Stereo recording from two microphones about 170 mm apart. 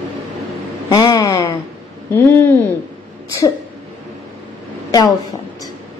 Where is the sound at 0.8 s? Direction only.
25° left (ahead or behind).